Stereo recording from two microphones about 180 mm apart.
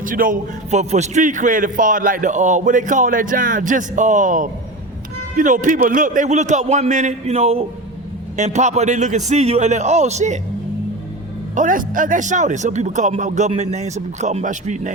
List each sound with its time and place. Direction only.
0.0 s a man's voice: 50° right (ahead or behind)
11.5 s a man's voice: 45° right (ahead or behind)